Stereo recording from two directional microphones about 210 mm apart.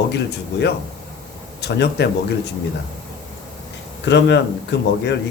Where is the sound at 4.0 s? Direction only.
55° left (ahead or behind).